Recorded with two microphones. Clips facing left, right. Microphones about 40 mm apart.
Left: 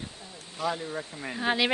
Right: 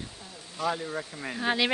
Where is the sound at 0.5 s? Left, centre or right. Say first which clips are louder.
Right 1 dB; centre.